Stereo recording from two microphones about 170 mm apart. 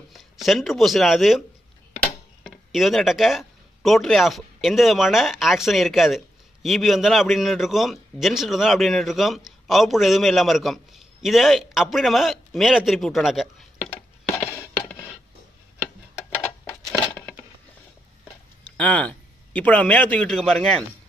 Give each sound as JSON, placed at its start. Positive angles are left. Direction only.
{"t": 0.1, "sound": "speech", "side_deg": 0}
{"t": 2.4, "sound": "speech", "side_deg": 0}
{"t": 14.3, "sound": "music", "side_deg": 15}
{"t": 18.8, "sound": "a man's voice", "side_deg": 5}